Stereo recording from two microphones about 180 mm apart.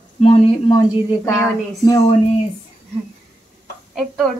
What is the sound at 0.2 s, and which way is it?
A woman's voice, 30° left (ahead or behind).